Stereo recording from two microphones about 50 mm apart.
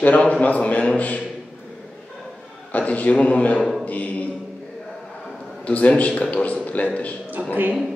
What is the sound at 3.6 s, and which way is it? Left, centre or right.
Speech, centre.